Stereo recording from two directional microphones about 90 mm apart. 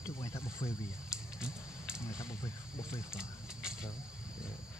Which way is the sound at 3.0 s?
5° right (ahead or behind).